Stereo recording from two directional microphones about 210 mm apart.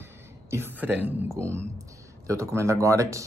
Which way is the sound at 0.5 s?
10° right (ahead or behind).